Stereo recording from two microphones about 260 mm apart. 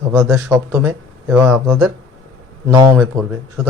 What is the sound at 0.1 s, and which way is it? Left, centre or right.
Speech, centre.